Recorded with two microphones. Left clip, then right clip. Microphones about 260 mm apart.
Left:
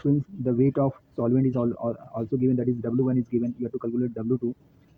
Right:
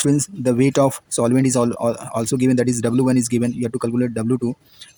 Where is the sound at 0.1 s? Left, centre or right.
Right.